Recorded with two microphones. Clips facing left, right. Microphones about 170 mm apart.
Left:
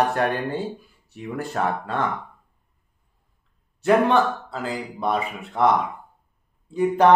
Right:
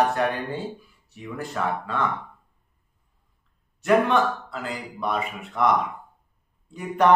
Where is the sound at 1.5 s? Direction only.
45° left (ahead or behind).